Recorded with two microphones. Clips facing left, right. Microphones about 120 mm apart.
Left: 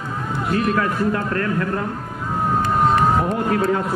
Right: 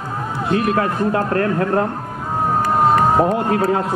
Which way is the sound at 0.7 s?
35° right (ahead or behind).